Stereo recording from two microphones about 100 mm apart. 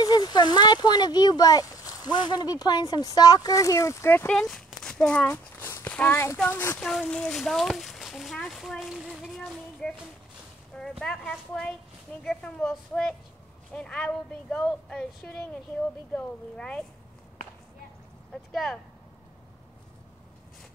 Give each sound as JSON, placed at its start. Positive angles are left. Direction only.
{"t": 0.0, "sound": "speech", "side_deg": 45}
{"t": 4.3, "sound": "speech", "side_deg": 5}
{"t": 5.3, "sound": "walk", "side_deg": 25}
{"t": 5.9, "sound": "speech", "side_deg": 20}
{"t": 6.8, "sound": "speech", "side_deg": 5}
{"t": 18.3, "sound": "speech", "side_deg": 0}